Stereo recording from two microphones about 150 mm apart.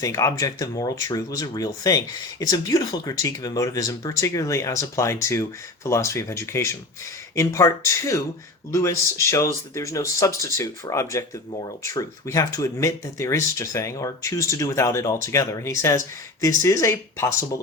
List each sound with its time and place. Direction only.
0.0 s speech: 20° left (ahead or behind)